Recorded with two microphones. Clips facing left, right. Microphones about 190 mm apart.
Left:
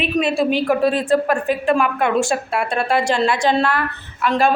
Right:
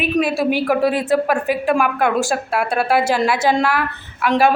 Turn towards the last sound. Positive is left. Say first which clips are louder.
# right 2 dB
turn(degrees=-10)  # may be behind; listen again after turning